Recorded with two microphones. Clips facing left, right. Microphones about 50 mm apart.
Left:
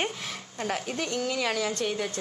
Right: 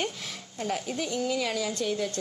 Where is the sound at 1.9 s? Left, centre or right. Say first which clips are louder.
Right 1 dB; centre.